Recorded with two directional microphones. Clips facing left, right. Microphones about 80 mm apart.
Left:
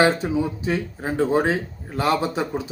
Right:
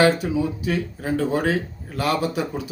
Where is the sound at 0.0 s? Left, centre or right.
Left.